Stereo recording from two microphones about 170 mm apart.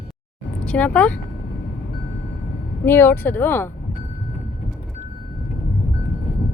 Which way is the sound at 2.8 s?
15° left (ahead or behind).